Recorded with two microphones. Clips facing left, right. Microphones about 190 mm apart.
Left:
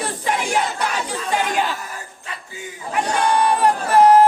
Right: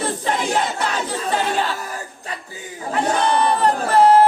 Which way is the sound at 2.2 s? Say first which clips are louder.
Right 2 dB; 40° right (ahead or behind).